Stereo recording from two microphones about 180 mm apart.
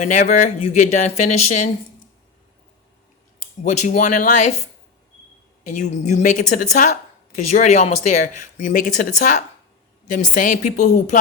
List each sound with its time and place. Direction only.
0.0 s speech: 40° left (ahead or behind)
3.6 s speech: 40° left (ahead or behind)
5.6 s speech: 40° left (ahead or behind)